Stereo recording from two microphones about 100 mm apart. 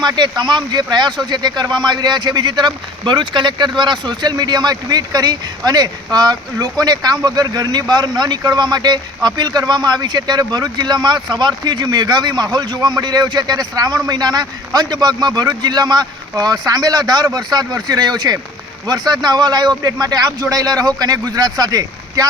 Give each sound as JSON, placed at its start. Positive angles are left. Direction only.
{"t": 0.0, "sound": "speech", "side_deg": -45}